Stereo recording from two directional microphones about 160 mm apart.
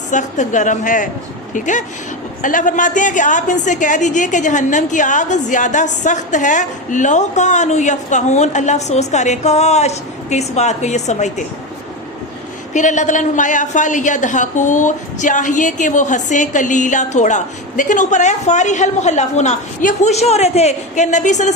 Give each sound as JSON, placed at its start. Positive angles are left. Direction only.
{"t": 0.1, "sound": "a woman's voice", "side_deg": 50}
{"t": 12.7, "sound": "a woman's voice", "side_deg": 50}